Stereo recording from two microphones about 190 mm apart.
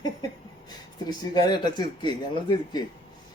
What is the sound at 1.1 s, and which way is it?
Speech, 20° left (ahead or behind).